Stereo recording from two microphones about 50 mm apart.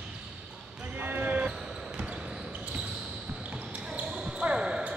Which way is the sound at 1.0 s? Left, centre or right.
Right.